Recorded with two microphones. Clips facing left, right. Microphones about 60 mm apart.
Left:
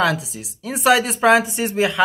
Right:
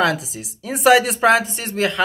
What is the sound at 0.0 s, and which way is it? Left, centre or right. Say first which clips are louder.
Speech: even; centre.